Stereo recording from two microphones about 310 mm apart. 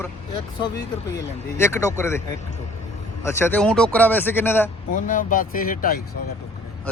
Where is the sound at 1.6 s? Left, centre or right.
Centre.